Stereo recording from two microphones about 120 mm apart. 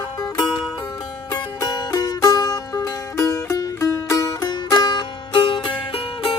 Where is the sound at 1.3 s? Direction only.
35° left (ahead or behind).